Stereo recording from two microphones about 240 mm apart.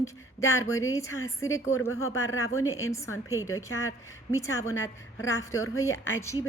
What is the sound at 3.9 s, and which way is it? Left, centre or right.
Speech, left.